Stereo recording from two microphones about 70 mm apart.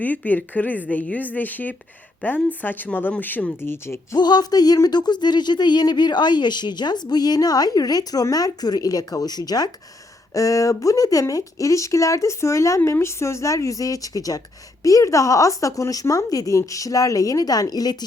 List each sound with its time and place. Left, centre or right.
0.3 s a woman's voice: left
4.2 s speech: left
10.3 s speech: left